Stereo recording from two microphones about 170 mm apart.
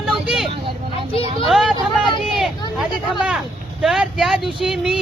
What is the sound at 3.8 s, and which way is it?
Speech, centre (ahead or behind).